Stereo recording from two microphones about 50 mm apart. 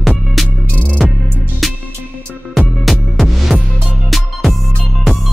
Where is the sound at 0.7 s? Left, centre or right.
Left.